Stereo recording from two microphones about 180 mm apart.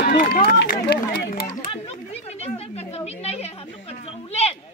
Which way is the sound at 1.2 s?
60° left (ahead or behind).